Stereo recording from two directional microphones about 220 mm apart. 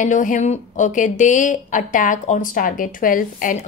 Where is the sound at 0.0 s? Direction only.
35° left (ahead or behind).